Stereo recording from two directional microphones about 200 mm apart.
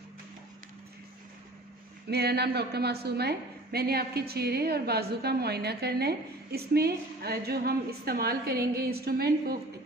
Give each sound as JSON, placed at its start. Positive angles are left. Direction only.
{"t": 2.0, "sound": "a woman's voice", "side_deg": -55}